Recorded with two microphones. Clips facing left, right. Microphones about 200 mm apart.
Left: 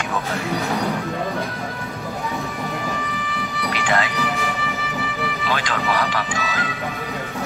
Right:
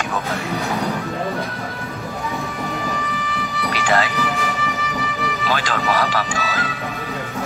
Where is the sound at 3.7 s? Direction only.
40° right (ahead or behind).